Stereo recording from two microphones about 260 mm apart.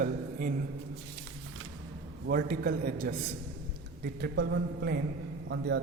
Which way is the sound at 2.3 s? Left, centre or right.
Right.